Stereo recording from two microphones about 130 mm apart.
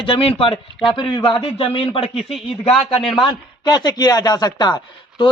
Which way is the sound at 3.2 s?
30° left (ahead or behind).